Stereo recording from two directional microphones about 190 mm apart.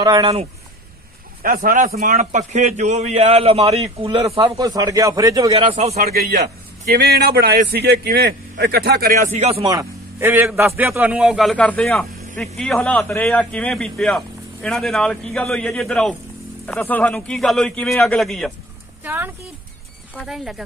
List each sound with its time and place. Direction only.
0.0 s speech: 25° right (ahead or behind)
1.4 s a man's voice: 45° right (ahead or behind); by 4.2 s 30° right (ahead or behind)
4.6 s a man's voice: 20° right (ahead or behind)
5.5 s a man's voice: 30° right (ahead or behind)
5.9 s a man's voice: 50° right (ahead or behind)
9.3 s a man's voice: 30° right (ahead or behind)
9.7 s a man's voice: 15° right (ahead or behind); by 18.5 s centre (ahead or behind)
19.0 s a man's voice: 10° right (ahead or behind)